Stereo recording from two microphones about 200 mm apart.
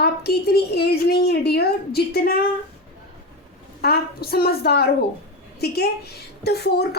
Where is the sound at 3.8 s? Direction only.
50° left (ahead or behind).